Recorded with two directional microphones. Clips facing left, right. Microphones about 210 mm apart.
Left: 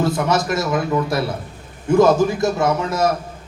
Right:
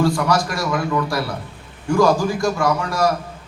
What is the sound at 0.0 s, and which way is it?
A man's voice, 20° left (ahead or behind).